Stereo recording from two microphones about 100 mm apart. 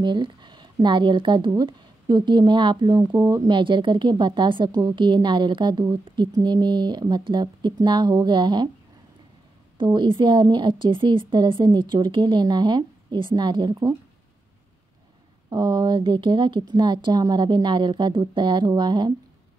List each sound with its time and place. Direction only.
0.0 s a woman's voice: 50° right (ahead or behind)
3.1 s speech: 30° right (ahead or behind)
3.4 s a woman's voice: 55° right (ahead or behind)
9.9 s a woman's voice: 50° right (ahead or behind)
15.5 s a woman's voice: 45° right (ahead or behind)